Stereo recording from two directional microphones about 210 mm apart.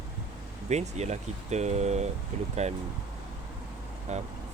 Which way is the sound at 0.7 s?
30° right (ahead or behind).